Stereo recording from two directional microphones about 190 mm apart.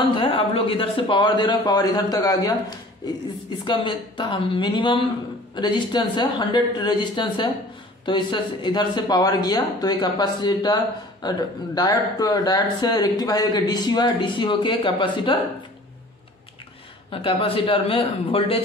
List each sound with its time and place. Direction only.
0.1 s speech: 25° left (ahead or behind)
3.6 s speech: 25° left (ahead or behind)
17.1 s speech: 30° left (ahead or behind)